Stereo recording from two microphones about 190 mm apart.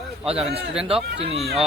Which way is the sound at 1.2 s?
35° right (ahead or behind).